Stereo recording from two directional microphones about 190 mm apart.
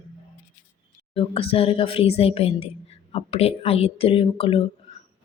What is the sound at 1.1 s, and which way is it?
A woman's voice, 30° left (ahead or behind).